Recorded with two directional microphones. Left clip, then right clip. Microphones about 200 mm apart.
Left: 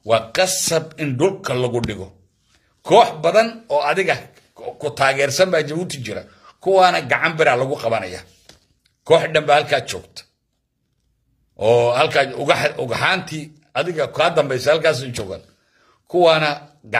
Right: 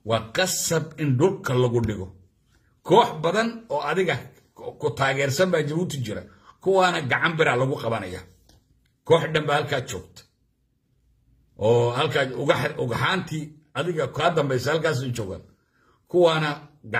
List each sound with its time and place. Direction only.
0.0 s a man's voice: 15° right (ahead or behind)
2.9 s a man's voice: 15° right (ahead or behind)
11.5 s a man's voice: 15° right (ahead or behind)
16.1 s speech: 20° right (ahead or behind)